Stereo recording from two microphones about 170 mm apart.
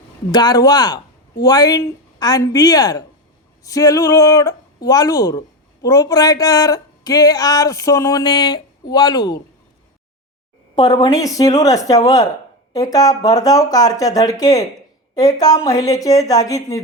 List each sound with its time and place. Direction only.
0.3 s speech: 25° left (ahead or behind)
10.8 s speech: 20° left (ahead or behind)